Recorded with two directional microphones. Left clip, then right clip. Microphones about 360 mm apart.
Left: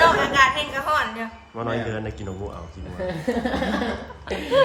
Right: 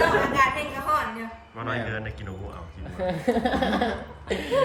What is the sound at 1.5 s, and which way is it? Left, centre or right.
Speech, centre.